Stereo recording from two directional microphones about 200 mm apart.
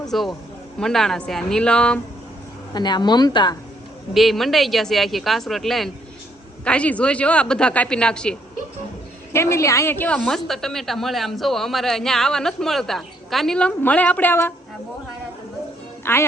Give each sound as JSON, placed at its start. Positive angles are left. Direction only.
{"t": 0.0, "sound": "speech", "side_deg": 0}
{"t": 2.7, "sound": "a woman's voice", "side_deg": 20}
{"t": 4.1, "sound": "a woman's voice", "side_deg": 0}
{"t": 16.1, "sound": "a woman's voice", "side_deg": 10}